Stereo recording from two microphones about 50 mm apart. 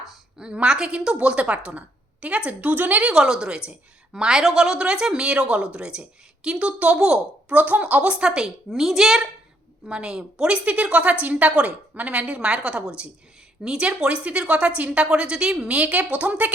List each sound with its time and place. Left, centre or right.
0.1 s a woman's voice: centre; by 3.1 s right
3.1 s a woman's voice: centre
7.5 s a woman's voice: right